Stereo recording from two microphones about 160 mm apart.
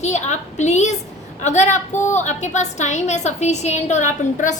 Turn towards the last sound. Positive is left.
turn(degrees=50)  # may be behind; listen again after turning